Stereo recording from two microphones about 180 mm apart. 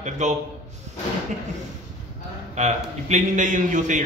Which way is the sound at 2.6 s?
40° right (ahead or behind).